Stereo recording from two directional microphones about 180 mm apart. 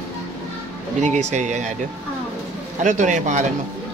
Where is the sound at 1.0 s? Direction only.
40° right (ahead or behind).